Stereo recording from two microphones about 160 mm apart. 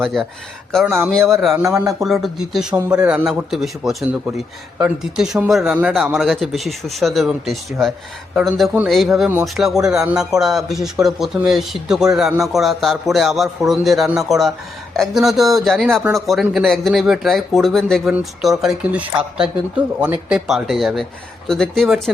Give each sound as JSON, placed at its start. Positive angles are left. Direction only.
{"t": 0.0, "sound": "speech", "side_deg": 0}
{"t": 1.7, "sound": "speech", "side_deg": -20}
{"t": 2.0, "sound": "speech", "side_deg": 0}